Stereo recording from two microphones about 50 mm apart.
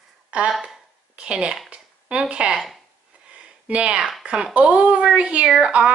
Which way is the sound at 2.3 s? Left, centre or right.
Right.